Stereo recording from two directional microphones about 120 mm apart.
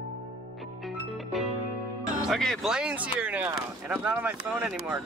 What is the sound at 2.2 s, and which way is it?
Speech, 5° left (ahead or behind).